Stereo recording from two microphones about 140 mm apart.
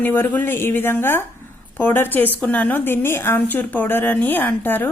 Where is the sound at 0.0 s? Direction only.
15° left (ahead or behind).